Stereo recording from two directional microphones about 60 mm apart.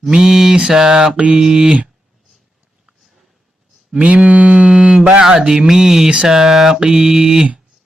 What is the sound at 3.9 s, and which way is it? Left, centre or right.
Mantra, centre.